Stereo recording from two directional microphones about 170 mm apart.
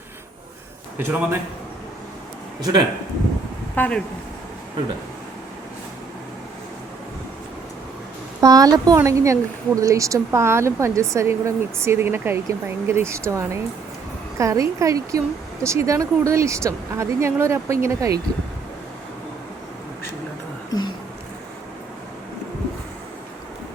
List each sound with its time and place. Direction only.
0.9 s speech: 15° right (ahead or behind)
2.6 s speech: 25° right (ahead or behind)
3.8 s speech: 5° left (ahead or behind)
8.4 s speech: 20° right (ahead or behind)
20.7 s a sound: 25° left (ahead or behind)